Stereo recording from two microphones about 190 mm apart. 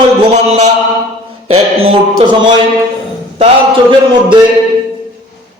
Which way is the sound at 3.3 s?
25° right (ahead or behind).